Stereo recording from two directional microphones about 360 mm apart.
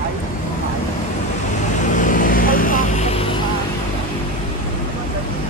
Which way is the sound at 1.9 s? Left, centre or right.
Left.